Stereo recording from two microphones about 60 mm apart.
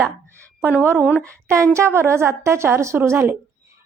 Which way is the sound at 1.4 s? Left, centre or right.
Right.